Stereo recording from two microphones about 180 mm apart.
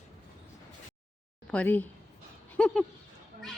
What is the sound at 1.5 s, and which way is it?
Speech, 10° left (ahead or behind).